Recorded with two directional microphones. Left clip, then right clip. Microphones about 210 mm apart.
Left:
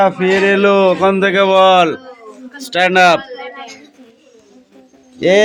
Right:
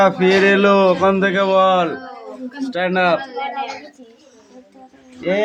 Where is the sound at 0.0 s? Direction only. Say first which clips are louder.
Left 1 dB; 10° left (ahead or behind); by 3.2 s 30° left (ahead or behind).